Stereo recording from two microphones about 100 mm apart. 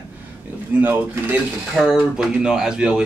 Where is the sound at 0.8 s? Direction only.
20° right (ahead or behind).